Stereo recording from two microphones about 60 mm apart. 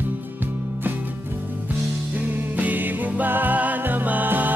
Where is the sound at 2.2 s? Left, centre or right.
Right.